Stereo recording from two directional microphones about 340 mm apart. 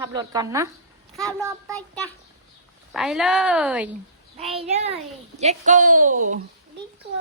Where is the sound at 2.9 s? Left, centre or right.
Centre.